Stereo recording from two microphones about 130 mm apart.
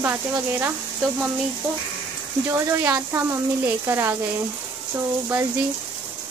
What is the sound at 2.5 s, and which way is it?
Speech, 20° right (ahead or behind).